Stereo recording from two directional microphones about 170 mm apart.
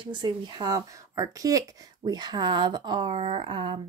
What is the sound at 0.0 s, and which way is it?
Speech, 25° right (ahead or behind).